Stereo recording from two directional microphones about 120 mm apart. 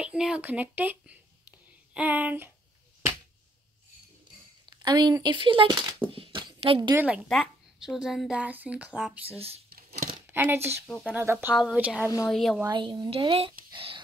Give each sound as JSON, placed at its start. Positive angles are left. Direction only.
{"t": 0.0, "sound": "a woman's voice", "side_deg": -5}
{"t": 4.8, "sound": "speech", "side_deg": -35}
{"t": 6.1, "sound": "a sound", "side_deg": -45}
{"t": 6.9, "sound": "a woman's voice", "side_deg": -15}
{"t": 7.2, "sound": "a woman's voice", "side_deg": 0}
{"t": 9.4, "sound": "a sound", "side_deg": -55}
{"t": 10.3, "sound": "a woman's voice", "side_deg": -20}
{"t": 12.3, "sound": "a woman's voice", "side_deg": 0}
{"t": 12.6, "sound": "speech", "side_deg": -40}
{"t": 13.1, "sound": "speech", "side_deg": -50}